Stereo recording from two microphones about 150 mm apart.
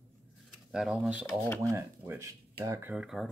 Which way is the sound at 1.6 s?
20° right (ahead or behind).